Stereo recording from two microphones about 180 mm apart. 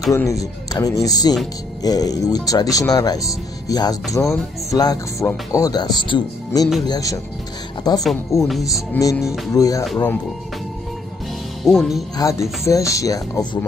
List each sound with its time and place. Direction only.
0.1 s speech: 15° left (ahead or behind)
11.6 s speech: centre (ahead or behind)
12.2 s speech: 15° left (ahead or behind)